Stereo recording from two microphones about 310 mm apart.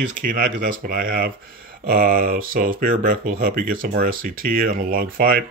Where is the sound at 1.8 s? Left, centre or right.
Right.